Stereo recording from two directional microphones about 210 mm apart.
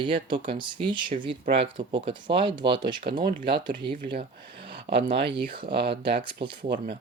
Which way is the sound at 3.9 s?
40° right (ahead or behind).